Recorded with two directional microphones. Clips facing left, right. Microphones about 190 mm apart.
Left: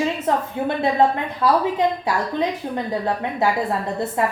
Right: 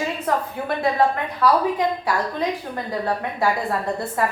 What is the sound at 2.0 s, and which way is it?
Speech, 25° left (ahead or behind).